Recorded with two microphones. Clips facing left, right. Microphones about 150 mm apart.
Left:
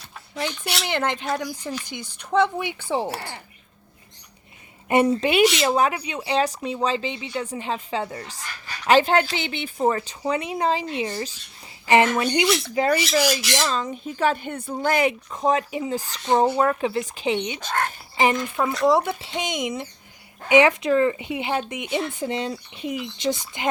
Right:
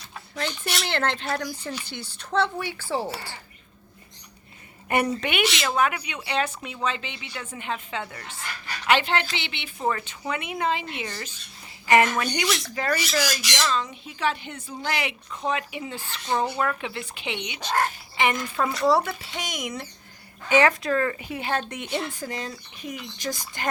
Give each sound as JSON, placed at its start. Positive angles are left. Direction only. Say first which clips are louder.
{"t": 0.3, "sound": "speech", "louder": "left 2 dB", "side_deg": 10}
{"t": 3.1, "sound": "speech", "louder": "left 3 dB", "side_deg": 65}
{"t": 4.9, "sound": "speech", "louder": "left 6 dB", "side_deg": 25}
{"t": 13.5, "sound": "speech", "louder": "left 2 dB", "side_deg": 35}
{"t": 18.9, "sound": "speech", "louder": "left 2 dB", "side_deg": 20}
{"t": 22.2, "sound": "speech", "louder": "left 6 dB", "side_deg": 30}